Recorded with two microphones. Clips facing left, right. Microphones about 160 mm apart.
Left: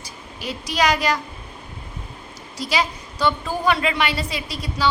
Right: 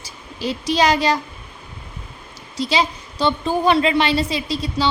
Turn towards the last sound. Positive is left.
turn(degrees=-25)  # may be behind; listen again after turning